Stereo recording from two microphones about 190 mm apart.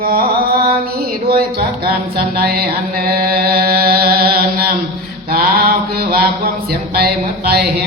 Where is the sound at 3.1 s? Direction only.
55° right (ahead or behind).